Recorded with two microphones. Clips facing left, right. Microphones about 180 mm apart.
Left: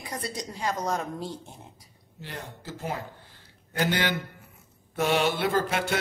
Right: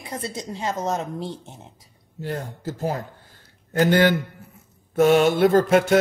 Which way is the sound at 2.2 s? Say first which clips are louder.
Right 10 dB; 45° right (ahead or behind).